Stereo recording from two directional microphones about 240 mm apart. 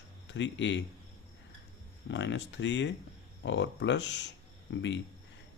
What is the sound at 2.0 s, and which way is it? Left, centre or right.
Speech, left.